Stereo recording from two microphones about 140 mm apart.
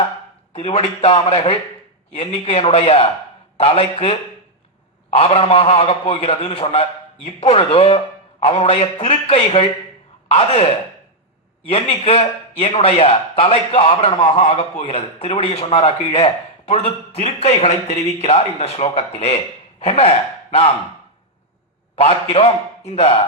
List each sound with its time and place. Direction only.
0.5 s a man's voice: 45° left (ahead or behind)
5.1 s a man's voice: 45° left (ahead or behind)
11.7 s a man's voice: 45° left (ahead or behind)
21.9 s a man's voice: 45° left (ahead or behind)